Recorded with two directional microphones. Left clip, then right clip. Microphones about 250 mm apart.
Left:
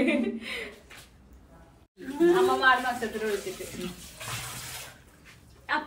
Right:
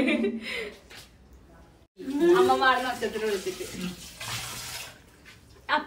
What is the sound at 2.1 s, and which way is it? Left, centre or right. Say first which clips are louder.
A woman's voice: right 2 dB; centre.